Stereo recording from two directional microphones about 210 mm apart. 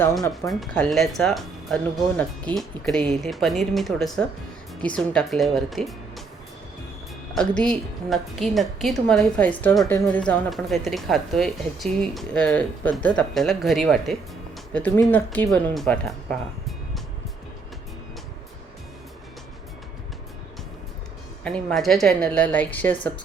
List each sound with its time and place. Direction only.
0.0 s speech: 15° left (ahead or behind)
0.4 s a woman's voice: centre (ahead or behind)
7.3 s a woman's voice: 5° left (ahead or behind)
21.4 s a woman's voice: 5° left (ahead or behind)